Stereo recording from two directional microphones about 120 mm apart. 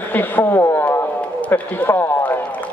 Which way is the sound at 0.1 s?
15° left (ahead or behind).